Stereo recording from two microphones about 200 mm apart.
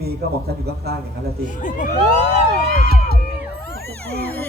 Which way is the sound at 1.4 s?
40° left (ahead or behind).